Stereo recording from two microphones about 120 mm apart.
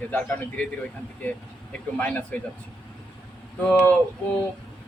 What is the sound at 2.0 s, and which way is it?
Speech, 10° left (ahead or behind).